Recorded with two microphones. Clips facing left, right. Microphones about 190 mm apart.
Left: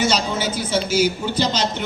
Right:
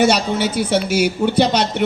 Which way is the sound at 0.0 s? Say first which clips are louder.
Right 5 dB; 65° right (ahead or behind).